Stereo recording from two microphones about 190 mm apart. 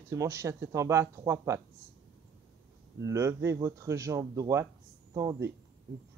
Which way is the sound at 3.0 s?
15° right (ahead or behind).